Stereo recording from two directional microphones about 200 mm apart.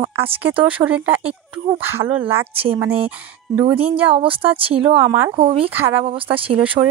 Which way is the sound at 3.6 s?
30° right (ahead or behind).